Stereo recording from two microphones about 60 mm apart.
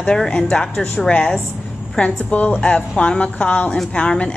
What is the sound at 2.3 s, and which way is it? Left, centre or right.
A woman's voice, left.